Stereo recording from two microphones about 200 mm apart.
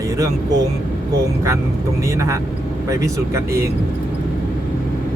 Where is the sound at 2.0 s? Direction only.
15° right (ahead or behind).